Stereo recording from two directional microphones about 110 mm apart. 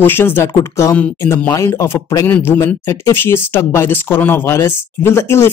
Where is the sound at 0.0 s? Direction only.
20° left (ahead or behind).